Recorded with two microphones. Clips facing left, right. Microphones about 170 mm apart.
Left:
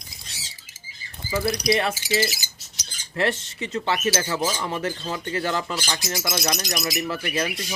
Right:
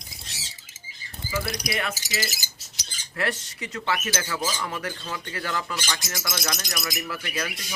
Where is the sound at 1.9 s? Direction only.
40° right (ahead or behind).